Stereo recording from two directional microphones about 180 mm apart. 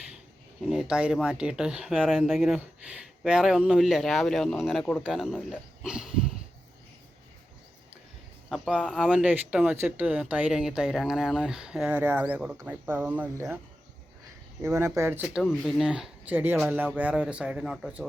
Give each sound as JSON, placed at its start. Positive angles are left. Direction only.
{"t": 0.6, "sound": "speech", "side_deg": -5}
{"t": 8.4, "sound": "speech", "side_deg": 0}
{"t": 9.0, "sound": "speech", "side_deg": -5}
{"t": 14.6, "sound": "speech", "side_deg": -15}
{"t": 15.4, "sound": "speech", "side_deg": 0}